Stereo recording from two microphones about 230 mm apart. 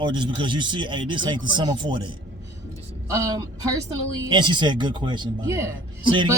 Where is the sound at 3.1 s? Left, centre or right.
Centre.